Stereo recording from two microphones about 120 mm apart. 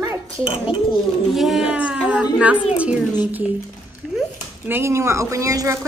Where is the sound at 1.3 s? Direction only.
Centre (ahead or behind).